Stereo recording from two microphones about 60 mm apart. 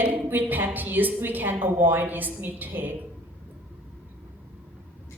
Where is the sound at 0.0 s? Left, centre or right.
Right.